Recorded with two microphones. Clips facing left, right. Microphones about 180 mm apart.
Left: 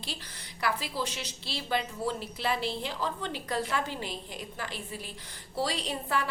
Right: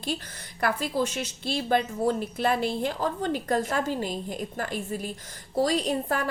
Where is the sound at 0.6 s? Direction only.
50° right (ahead or behind).